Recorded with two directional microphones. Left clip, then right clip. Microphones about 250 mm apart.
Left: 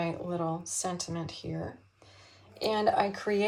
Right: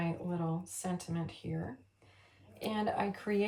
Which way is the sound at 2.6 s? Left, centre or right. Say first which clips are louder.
Left 8 dB; left.